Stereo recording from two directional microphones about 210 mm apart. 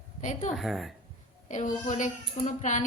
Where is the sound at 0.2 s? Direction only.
35° left (ahead or behind).